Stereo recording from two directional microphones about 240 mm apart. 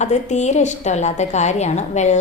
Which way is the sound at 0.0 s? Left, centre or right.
Left.